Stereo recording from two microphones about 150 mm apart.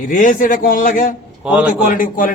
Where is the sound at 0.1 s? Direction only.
60° left (ahead or behind).